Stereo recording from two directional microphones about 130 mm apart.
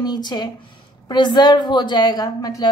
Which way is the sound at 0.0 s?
30° left (ahead or behind).